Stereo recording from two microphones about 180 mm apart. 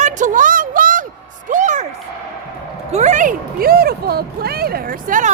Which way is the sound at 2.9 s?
40° right (ahead or behind).